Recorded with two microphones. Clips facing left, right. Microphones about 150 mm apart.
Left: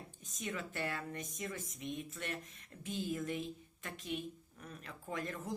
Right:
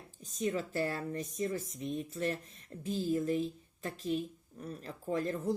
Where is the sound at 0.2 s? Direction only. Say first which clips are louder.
Right 9 dB; 30° right (ahead or behind).